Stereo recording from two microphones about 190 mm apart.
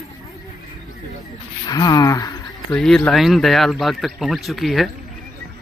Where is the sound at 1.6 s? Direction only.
20° left (ahead or behind).